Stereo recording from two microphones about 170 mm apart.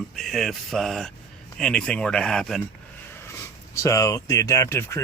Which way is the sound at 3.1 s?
15° left (ahead or behind).